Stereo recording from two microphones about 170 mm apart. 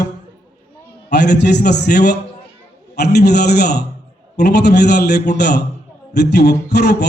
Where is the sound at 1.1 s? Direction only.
80° left.